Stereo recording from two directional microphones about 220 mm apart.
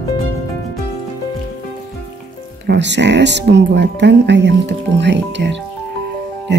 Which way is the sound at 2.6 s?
50° right (ahead or behind).